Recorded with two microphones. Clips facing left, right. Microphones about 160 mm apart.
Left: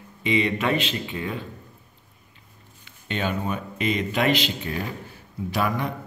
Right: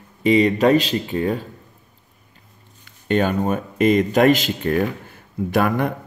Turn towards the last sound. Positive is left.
turn(degrees=-55)  # may be behind; listen again after turning